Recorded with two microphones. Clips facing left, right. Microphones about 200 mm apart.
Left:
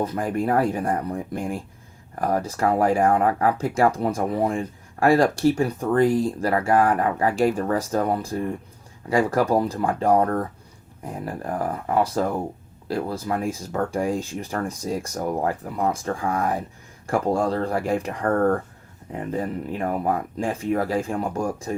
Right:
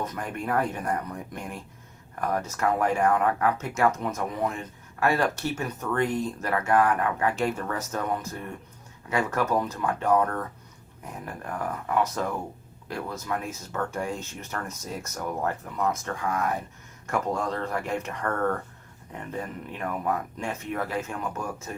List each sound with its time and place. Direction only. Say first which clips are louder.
0.0 s speech: left 8 dB; 30° left (ahead or behind)